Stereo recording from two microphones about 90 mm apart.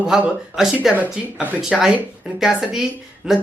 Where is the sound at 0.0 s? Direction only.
5° right (ahead or behind).